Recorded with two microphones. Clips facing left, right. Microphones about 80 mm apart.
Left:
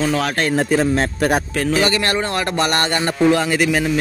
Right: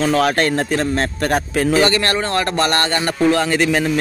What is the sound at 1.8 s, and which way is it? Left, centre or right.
Speech, centre.